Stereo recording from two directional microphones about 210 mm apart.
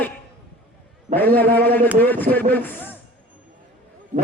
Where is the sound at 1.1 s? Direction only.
10° left (ahead or behind).